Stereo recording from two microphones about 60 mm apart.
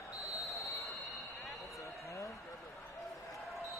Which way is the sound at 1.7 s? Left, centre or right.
Left.